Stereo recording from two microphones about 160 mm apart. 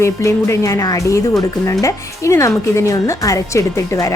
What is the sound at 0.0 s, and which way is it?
Speech, 15° left (ahead or behind).